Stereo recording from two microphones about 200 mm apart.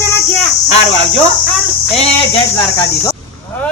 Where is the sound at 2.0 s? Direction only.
25° left (ahead or behind).